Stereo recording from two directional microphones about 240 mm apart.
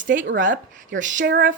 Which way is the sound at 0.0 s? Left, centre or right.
Right.